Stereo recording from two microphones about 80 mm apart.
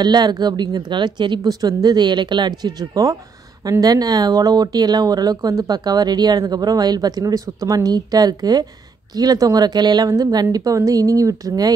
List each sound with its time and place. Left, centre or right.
0.0 s speech: right
1.5 s a woman's voice: right